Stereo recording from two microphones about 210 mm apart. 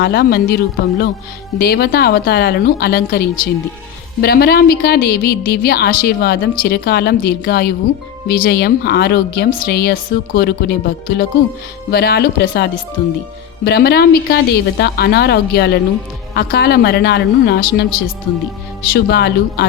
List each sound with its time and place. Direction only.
0.0 s a woman's voice: 45° left (ahead or behind)
18.9 s a woman's voice: 50° left (ahead or behind)